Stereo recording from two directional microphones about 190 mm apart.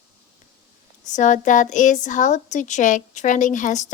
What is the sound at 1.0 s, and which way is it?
Speech, 40° left (ahead or behind).